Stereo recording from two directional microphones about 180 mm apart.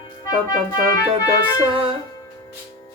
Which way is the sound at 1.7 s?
30° right (ahead or behind).